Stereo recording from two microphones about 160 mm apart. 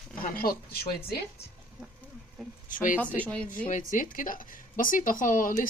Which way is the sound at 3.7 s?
55° left (ahead or behind).